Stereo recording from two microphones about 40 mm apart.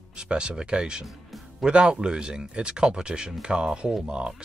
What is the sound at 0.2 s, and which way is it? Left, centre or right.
Speech, right.